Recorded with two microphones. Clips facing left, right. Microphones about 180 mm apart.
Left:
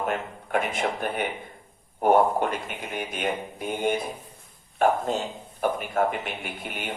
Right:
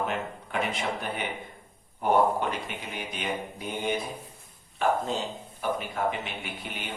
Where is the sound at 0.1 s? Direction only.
50° left (ahead or behind).